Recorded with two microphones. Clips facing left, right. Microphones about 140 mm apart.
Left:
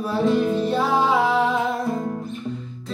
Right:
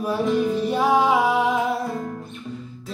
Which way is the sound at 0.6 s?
15° right (ahead or behind).